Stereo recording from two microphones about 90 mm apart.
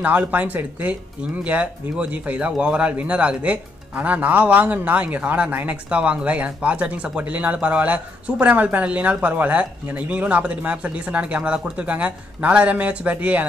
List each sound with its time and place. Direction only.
0.0 s speech: 15° right (ahead or behind)